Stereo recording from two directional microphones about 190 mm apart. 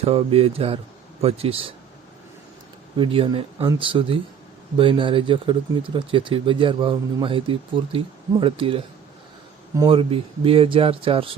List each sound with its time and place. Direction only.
0.0 s speech: 30° right (ahead or behind)
3.0 s speech: 25° right (ahead or behind)